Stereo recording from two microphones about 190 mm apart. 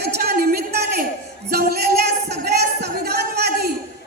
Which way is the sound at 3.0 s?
60° right (ahead or behind).